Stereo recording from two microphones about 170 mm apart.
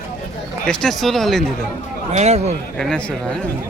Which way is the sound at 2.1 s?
40° right (ahead or behind).